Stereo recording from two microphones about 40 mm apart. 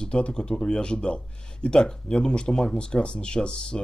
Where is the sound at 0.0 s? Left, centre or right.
Left.